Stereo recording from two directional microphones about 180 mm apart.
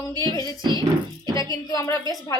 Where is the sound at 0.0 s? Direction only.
20° left (ahead or behind).